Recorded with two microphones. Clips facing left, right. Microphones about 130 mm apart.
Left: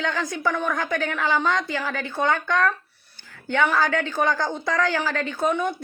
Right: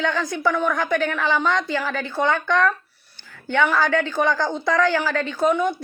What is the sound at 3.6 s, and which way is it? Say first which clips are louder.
A woman's voice: right 2 dB; 20° left (ahead or behind).